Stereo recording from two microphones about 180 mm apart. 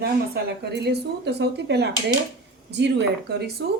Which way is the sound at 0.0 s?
65° right (ahead or behind).